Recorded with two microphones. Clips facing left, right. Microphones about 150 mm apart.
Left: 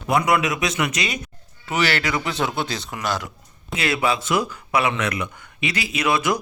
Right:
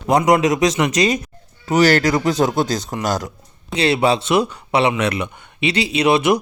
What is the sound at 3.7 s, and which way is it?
Speech, 30° right (ahead or behind).